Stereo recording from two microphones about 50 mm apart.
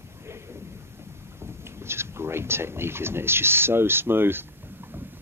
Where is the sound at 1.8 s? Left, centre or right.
Right.